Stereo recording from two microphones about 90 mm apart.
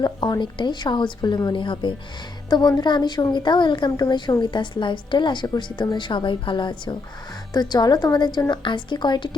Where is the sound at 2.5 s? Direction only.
50° left (ahead or behind).